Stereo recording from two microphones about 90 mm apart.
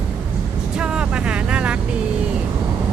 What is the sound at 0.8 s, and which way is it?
Vehicle, 10° right (ahead or behind).